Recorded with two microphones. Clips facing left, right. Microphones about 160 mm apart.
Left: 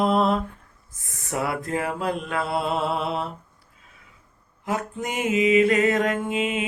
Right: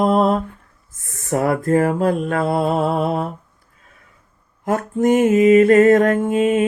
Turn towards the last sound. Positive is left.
turn(degrees=-45)  # may be behind; listen again after turning